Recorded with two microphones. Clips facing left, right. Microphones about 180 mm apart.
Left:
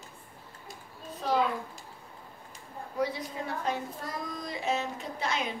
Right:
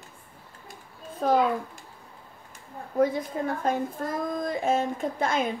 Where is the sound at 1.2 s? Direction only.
50° right (ahead or behind).